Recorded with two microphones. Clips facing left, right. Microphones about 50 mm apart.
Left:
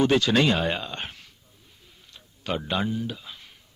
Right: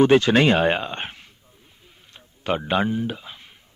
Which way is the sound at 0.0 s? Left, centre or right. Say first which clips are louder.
Right 5 dB; right.